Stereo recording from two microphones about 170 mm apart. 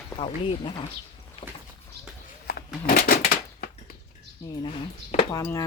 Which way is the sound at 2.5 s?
70° left (ahead or behind).